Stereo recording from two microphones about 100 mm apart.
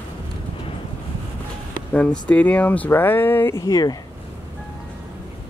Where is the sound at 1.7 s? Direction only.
15° left (ahead or behind); by 3.9 s 35° left (ahead or behind).